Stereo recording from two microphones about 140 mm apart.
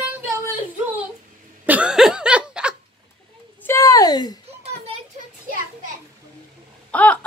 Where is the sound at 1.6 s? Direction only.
10° right (ahead or behind).